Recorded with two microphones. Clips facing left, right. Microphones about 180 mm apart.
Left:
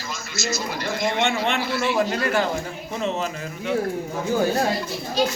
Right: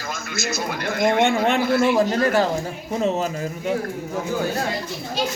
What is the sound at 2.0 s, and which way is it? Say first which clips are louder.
Speech: right 3 dB; 40° right (ahead or behind).